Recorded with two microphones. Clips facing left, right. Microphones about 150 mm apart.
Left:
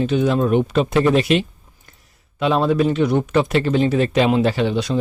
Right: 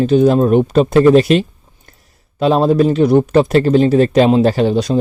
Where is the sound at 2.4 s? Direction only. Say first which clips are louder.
Right 5 dB; 35° right (ahead or behind).